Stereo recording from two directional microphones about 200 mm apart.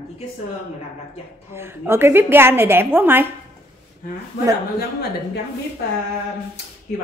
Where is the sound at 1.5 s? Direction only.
10° right (ahead or behind).